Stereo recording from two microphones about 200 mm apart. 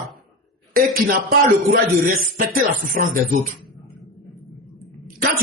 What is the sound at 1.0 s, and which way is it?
Speech, 45° right (ahead or behind).